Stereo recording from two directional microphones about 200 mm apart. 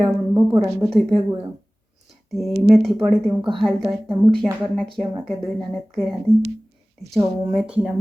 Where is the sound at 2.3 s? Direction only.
Centre (ahead or behind).